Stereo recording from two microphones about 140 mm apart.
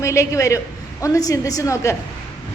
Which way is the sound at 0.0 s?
20° left (ahead or behind).